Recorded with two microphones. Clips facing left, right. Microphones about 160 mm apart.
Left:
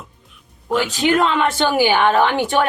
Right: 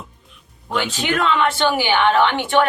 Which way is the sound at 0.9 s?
40° left (ahead or behind).